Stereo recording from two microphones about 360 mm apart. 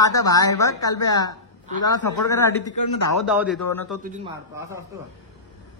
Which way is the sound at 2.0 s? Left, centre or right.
Left.